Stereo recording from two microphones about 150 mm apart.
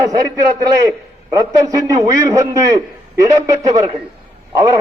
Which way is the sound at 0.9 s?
25° right (ahead or behind).